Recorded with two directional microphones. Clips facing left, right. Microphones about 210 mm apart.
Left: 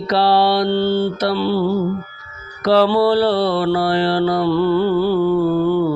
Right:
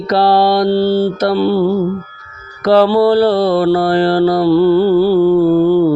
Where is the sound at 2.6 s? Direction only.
45° right (ahead or behind).